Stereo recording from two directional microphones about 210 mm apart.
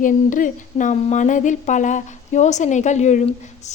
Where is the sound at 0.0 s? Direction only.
40° left (ahead or behind).